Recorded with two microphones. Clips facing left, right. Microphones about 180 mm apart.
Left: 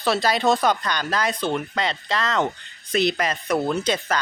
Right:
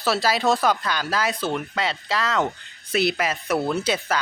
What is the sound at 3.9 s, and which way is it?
Speech, 5° right (ahead or behind).